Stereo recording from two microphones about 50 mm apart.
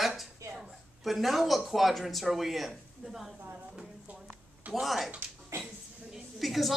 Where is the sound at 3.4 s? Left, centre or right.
Right.